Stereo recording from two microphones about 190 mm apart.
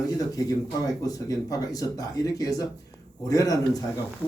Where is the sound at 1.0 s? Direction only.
20° left (ahead or behind).